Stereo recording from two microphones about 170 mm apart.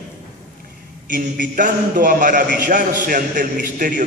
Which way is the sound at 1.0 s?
50° right (ahead or behind).